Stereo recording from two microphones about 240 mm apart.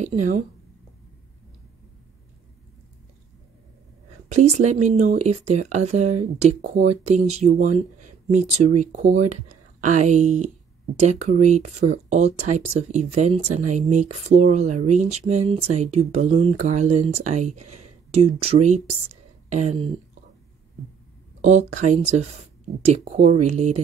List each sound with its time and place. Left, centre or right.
4.3 s speech: right
21.4 s speech: right